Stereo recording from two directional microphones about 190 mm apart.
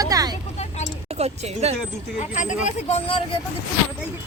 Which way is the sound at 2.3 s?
40° left (ahead or behind).